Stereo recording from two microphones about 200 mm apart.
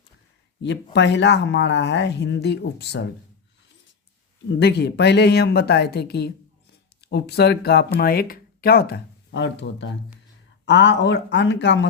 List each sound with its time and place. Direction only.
0.9 s speech: 60° left (ahead or behind)
4.6 s speech: 60° left (ahead or behind)